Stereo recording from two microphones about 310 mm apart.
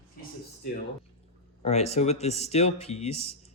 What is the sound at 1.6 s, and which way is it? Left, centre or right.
Speech, centre.